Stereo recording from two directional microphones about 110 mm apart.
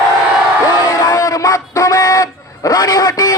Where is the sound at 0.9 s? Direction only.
35° left (ahead or behind).